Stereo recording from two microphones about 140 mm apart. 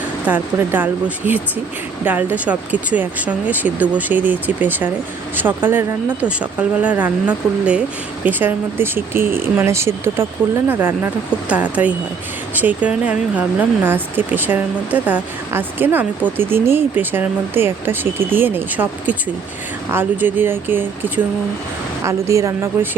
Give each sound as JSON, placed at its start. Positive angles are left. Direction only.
{"t": 0.3, "sound": "a woman's voice", "side_deg": -15}